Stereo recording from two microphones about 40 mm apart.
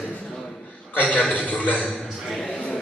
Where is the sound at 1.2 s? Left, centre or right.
Left.